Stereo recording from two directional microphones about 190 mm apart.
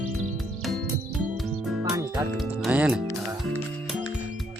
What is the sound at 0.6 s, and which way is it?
Music, centre (ahead or behind).